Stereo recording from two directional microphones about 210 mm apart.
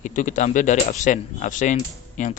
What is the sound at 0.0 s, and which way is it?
Speech, 35° left (ahead or behind).